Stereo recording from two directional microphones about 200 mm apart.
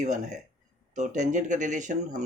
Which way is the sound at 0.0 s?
35° right (ahead or behind).